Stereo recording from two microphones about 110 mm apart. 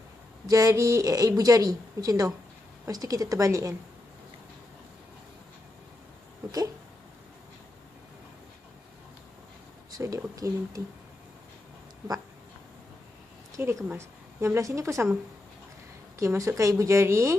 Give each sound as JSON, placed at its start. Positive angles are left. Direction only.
{"t": 0.4, "sound": "a woman's voice", "side_deg": -30}
{"t": 10.0, "sound": "speech", "side_deg": -30}
{"t": 13.6, "sound": "speech", "side_deg": -20}
{"t": 16.1, "sound": "speech", "side_deg": -25}